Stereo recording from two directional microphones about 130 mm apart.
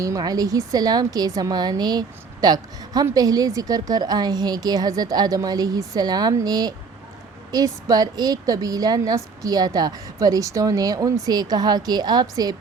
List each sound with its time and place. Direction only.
0.0 s a woman's voice: 30° right (ahead or behind)